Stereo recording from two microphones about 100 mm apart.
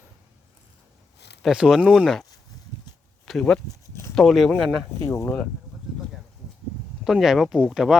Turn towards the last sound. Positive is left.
turn(degrees=-5)  # may be behind; listen again after turning